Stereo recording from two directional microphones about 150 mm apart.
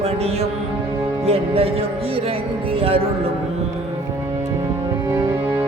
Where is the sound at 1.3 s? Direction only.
40° right (ahead or behind).